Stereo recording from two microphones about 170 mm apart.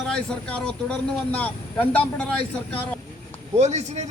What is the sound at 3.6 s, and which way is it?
Speech, 40° right (ahead or behind).